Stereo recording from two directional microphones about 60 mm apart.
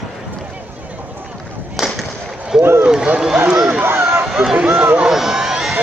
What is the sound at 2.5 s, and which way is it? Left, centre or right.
Speech, centre.